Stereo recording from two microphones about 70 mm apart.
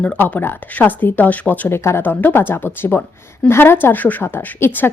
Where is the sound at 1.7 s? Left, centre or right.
Left.